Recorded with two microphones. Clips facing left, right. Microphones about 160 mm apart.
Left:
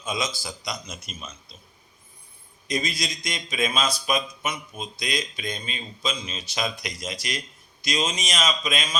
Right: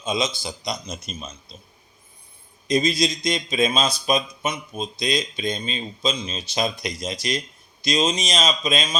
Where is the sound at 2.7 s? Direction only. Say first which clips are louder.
Right 8 dB; 25° right (ahead or behind).